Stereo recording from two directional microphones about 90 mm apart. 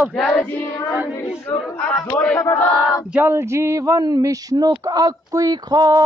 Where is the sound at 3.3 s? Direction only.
30° right (ahead or behind).